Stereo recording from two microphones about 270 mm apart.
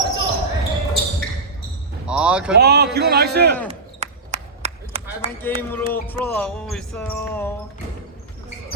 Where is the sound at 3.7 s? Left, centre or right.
Right.